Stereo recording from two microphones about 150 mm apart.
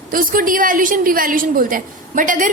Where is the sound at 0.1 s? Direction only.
70° right (ahead or behind).